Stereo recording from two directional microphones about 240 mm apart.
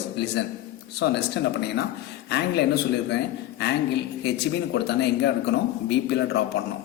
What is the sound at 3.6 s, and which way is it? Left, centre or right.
Speech, left.